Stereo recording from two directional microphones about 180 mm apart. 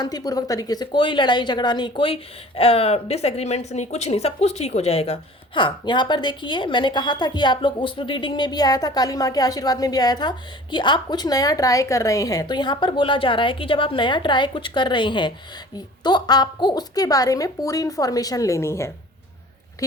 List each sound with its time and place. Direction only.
0.0 s speech: 20° left (ahead or behind)